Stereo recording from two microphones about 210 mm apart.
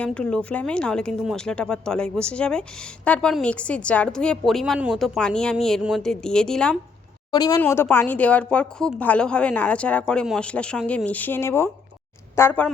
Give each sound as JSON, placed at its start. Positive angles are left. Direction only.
{"t": 0.0, "sound": "speech", "side_deg": 5}
{"t": 7.3, "sound": "a woman's voice", "side_deg": 20}